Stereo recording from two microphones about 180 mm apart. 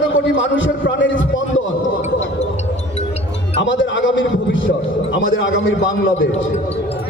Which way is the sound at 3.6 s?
90° left.